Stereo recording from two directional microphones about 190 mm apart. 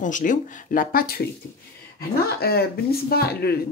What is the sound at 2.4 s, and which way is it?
Speech, 55° left (ahead or behind).